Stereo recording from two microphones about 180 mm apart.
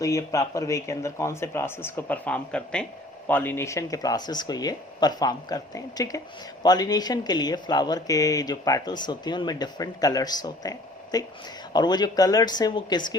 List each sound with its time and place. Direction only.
0.0 s speech: 20° left (ahead or behind)